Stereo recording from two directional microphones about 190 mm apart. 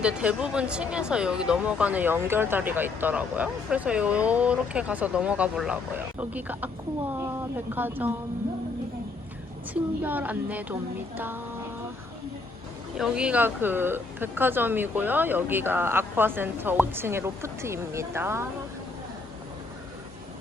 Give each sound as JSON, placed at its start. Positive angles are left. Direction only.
{"t": 0.0, "sound": "speech", "side_deg": -5}
{"t": 10.0, "sound": "speech", "side_deg": -10}
{"t": 13.0, "sound": "speech", "side_deg": -5}